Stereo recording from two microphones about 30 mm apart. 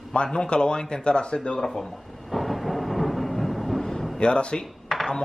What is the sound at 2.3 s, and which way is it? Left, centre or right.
Vehicle, centre.